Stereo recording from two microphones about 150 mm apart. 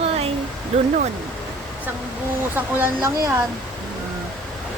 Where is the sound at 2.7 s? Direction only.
15° right (ahead or behind).